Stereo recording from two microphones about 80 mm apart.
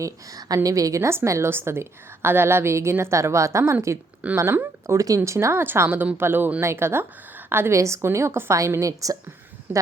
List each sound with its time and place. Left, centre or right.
0.0 s a woman's voice: right
4.9 s a woman's voice: right